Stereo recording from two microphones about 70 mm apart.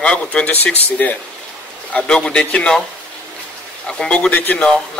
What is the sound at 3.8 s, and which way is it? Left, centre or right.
Speech, centre.